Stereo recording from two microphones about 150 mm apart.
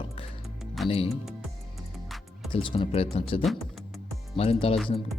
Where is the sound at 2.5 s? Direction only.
35° left (ahead or behind).